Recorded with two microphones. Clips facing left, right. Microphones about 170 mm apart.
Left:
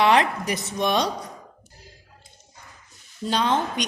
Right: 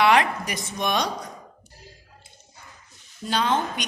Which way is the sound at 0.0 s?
30° left (ahead or behind).